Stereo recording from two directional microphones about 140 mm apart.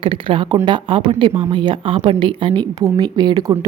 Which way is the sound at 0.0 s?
35° right (ahead or behind).